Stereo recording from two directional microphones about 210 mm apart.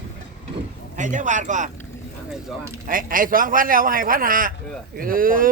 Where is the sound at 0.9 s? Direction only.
35° right (ahead or behind).